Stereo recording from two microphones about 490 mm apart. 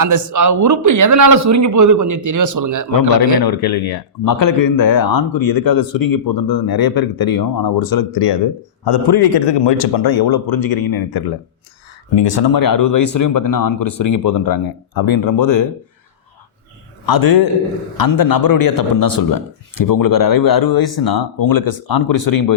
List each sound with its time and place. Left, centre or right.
0.0 s a man's voice: right
3.4 s speech: left
12.1 s speech: left
12.5 s speech: left
17.1 s speech: left